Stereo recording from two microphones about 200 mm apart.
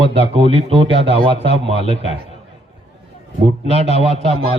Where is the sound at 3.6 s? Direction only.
30° right (ahead or behind).